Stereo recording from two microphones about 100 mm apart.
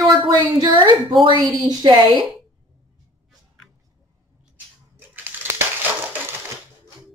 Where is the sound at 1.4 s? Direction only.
40° right (ahead or behind).